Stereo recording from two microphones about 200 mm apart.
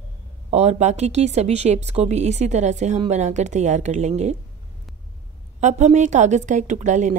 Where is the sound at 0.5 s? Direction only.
35° right (ahead or behind).